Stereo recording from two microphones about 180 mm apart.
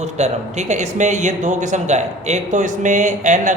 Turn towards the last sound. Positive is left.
turn(degrees=-45)  # may be behind; listen again after turning